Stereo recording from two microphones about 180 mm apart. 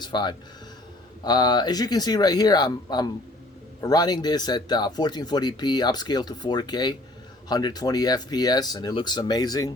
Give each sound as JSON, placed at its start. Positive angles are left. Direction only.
{"t": 0.0, "sound": "speech", "side_deg": 25}